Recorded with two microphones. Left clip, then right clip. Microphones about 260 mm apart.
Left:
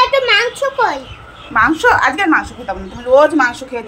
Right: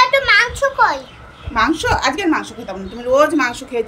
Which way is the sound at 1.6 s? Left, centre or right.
Centre.